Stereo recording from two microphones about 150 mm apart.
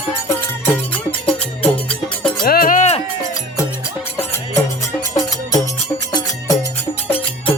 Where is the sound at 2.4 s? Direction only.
70° left (ahead or behind); by 3.0 s 50° left (ahead or behind).